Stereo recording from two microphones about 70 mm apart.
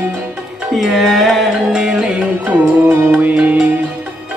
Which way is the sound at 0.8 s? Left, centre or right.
Centre.